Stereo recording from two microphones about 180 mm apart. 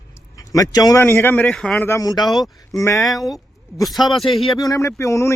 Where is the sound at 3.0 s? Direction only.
Centre (ahead or behind).